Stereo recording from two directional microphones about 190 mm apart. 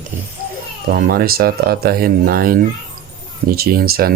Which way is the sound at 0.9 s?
50° right (ahead or behind).